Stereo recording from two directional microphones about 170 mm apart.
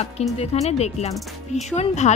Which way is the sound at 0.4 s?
40° left (ahead or behind).